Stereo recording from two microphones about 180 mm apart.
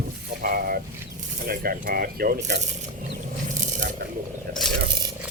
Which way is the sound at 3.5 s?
45° right (ahead or behind).